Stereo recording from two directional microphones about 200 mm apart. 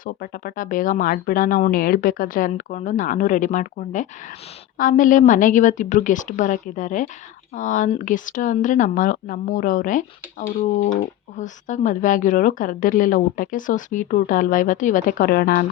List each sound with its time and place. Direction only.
0.0 s speech: 45° left (ahead or behind)